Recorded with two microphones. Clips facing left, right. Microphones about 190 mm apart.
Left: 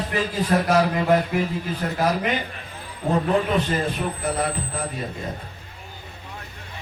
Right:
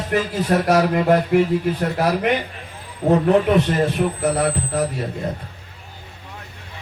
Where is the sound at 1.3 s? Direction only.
60° right (ahead or behind).